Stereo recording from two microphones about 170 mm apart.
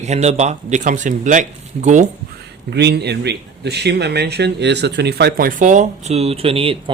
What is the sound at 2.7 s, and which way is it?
Speech, 75° right (ahead or behind).